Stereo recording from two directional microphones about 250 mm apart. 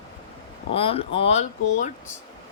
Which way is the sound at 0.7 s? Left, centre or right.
Left.